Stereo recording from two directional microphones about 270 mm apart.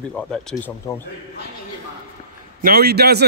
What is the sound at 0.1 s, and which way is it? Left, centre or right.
Speech, centre.